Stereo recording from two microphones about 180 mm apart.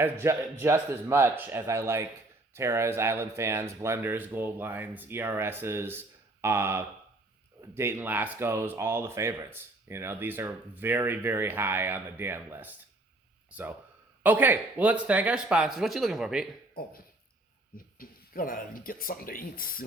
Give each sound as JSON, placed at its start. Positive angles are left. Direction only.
{"t": 0.0, "sound": "speech", "side_deg": -15}
{"t": 17.7, "sound": "speech", "side_deg": 50}